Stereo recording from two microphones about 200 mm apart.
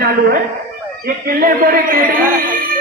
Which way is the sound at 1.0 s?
45° right (ahead or behind).